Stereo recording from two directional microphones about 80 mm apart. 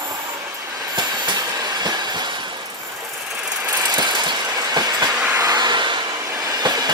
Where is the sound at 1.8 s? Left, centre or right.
Right.